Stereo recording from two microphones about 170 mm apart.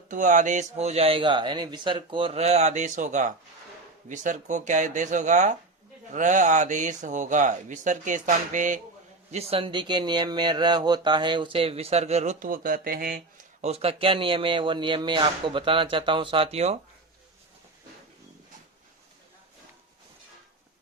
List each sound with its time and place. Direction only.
0.1 s speech: 50° right (ahead or behind)
9.3 s speech: 35° right (ahead or behind); by 13.2 s 60° right (ahead or behind)
13.6 s speech: 40° right (ahead or behind)